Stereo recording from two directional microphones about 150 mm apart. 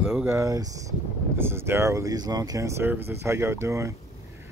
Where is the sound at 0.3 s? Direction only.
20° right (ahead or behind).